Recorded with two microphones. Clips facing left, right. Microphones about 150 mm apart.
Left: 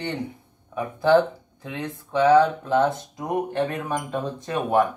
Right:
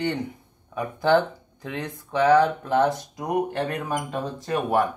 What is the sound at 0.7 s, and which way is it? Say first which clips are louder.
Speech: left 2 dB; 25° left (ahead or behind).